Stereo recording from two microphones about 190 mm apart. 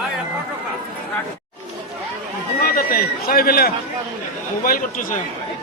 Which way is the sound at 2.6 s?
50° left (ahead or behind).